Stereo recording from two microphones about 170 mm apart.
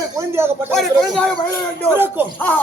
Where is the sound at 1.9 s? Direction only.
10° right (ahead or behind).